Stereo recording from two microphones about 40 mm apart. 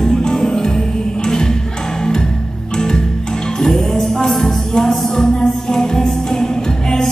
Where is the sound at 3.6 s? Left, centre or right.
Centre.